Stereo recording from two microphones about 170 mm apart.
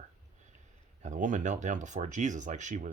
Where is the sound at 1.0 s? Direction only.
50° right (ahead or behind).